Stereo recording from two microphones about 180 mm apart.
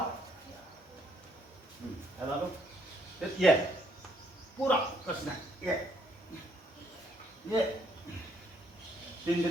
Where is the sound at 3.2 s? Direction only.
Centre (ahead or behind).